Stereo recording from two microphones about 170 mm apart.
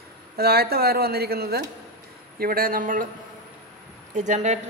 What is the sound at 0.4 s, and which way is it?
Speech, 65° right (ahead or behind).